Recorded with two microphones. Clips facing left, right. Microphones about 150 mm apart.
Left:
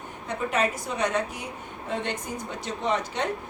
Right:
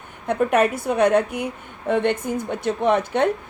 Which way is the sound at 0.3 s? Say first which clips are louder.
Right 8 dB; 60° right (ahead or behind).